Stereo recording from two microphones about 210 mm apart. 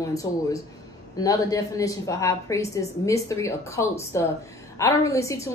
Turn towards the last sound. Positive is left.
turn(degrees=15)  # may be behind; listen again after turning